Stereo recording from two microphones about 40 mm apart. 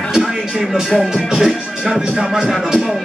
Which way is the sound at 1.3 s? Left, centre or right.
Centre.